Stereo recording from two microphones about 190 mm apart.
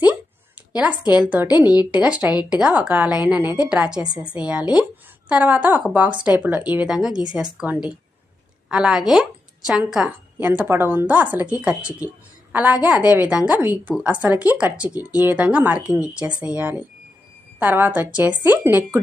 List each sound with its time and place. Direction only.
0.8 s a woman's voice: 5° right (ahead or behind)